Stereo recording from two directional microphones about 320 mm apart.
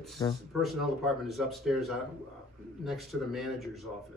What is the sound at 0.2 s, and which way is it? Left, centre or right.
Speech, centre.